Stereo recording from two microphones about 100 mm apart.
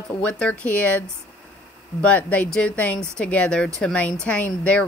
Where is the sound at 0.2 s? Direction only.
15° left (ahead or behind).